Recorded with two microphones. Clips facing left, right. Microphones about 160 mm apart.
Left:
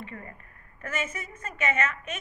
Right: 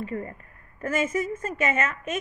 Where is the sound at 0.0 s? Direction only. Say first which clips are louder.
Right 9 dB; 35° right (ahead or behind).